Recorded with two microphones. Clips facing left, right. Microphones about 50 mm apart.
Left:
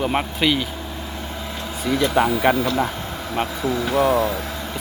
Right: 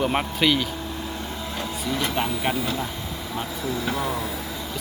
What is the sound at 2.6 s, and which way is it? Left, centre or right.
Speech, left.